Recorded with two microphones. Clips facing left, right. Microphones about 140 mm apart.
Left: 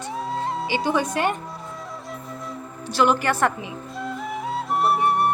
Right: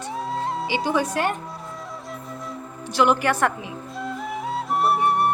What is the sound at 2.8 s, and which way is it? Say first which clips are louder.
Speech: even; 15° right (ahead or behind).